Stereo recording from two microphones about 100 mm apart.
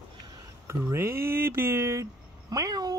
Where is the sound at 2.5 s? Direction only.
40° right (ahead or behind).